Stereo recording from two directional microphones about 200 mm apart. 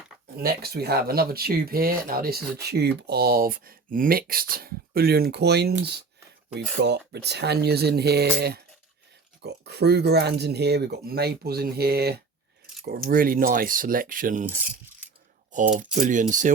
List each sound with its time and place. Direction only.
0.3 s speech: 50° right (ahead or behind)
15.8 s speech: 40° right (ahead or behind)